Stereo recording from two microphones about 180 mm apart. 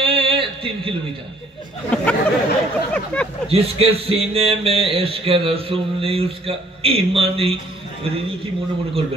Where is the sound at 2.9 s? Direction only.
5° left (ahead or behind).